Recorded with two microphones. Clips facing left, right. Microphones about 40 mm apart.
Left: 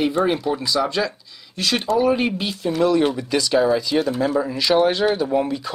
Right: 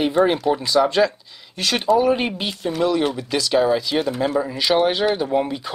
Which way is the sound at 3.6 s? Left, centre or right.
Centre.